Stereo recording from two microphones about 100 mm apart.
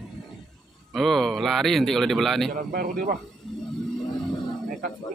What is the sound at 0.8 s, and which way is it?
A man's voice, centre (ahead or behind).